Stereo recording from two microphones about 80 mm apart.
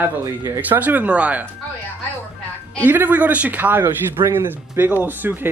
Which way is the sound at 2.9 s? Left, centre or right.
Right.